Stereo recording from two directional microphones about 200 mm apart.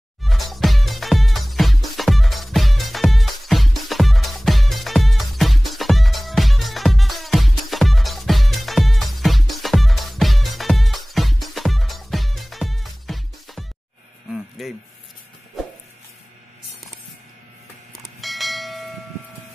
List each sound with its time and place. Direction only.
0.2 s music: centre (ahead or behind)
14.6 s a sound: centre (ahead or behind)
18.0 s bell: centre (ahead or behind)